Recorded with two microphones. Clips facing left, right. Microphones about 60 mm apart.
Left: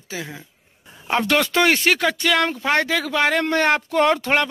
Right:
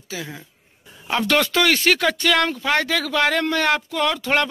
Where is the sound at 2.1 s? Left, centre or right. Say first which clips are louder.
Even; centre.